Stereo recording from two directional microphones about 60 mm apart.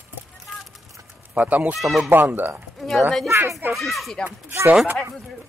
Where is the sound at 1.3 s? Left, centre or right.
Right.